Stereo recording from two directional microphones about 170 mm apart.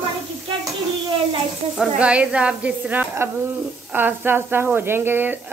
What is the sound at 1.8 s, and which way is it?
A woman's voice, 5° right (ahead or behind).